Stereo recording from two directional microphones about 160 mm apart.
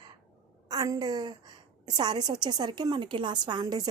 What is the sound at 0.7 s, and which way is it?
Speech, 25° right (ahead or behind).